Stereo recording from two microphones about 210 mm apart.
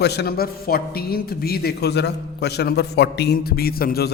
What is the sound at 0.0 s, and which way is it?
A man's voice, 50° left (ahead or behind).